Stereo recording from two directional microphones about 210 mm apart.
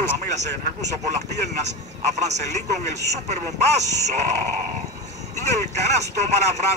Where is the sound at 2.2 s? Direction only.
35° right (ahead or behind).